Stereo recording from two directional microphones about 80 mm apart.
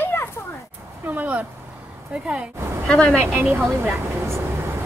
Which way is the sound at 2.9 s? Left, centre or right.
Centre.